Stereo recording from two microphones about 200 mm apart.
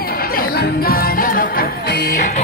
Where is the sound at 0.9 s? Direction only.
45° left (ahead or behind).